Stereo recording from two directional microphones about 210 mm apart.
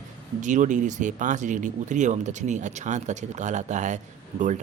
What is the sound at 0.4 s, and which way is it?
Speech, 35° right (ahead or behind).